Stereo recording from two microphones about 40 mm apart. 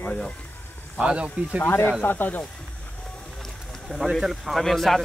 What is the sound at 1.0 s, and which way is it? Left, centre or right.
Speech, right.